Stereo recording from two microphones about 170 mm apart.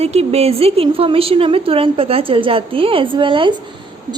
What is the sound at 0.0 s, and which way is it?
A woman's voice, 35° right (ahead or behind).